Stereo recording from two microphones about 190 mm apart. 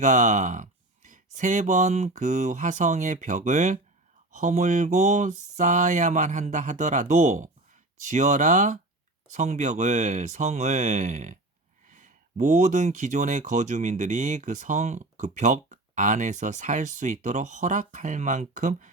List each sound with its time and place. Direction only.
0.0 s speech: 40° right (ahead or behind)